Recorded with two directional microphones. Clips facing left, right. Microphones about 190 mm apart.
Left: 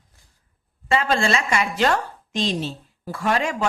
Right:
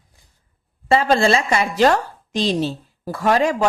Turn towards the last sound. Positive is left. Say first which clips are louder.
# right 5 dB
turn(degrees=-40)  # may be behind; listen again after turning